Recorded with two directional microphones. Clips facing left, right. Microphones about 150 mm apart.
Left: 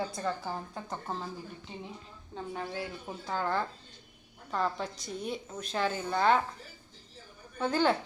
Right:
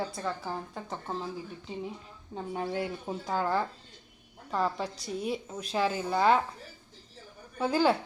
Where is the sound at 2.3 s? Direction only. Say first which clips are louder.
Right 4 dB; 20° right (ahead or behind).